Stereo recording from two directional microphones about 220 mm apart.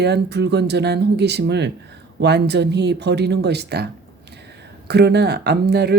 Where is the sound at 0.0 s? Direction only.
50° right (ahead or behind).